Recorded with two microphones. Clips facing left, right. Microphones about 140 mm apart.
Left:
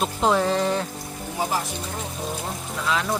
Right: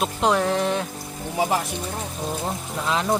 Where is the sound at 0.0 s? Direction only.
Centre (ahead or behind).